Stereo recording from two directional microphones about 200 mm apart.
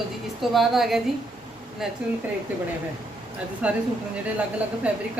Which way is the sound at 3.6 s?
5° right (ahead or behind).